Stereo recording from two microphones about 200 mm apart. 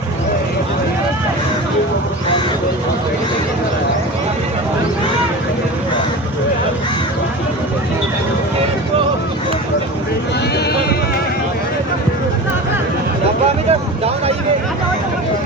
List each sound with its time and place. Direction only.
13.7 s vehicle: 30° right (ahead or behind)